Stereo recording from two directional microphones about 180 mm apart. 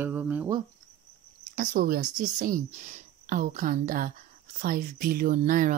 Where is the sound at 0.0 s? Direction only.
10° right (ahead or behind).